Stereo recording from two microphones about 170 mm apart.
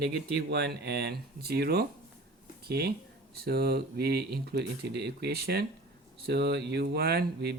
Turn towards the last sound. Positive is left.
turn(degrees=-70)  # may be behind; listen again after turning